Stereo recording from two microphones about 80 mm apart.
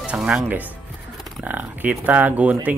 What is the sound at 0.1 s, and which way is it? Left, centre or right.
Speech, centre.